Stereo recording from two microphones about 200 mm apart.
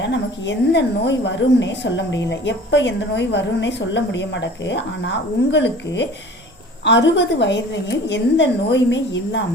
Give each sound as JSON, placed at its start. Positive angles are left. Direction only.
{"t": 0.0, "sound": "a woman's voice", "side_deg": 60}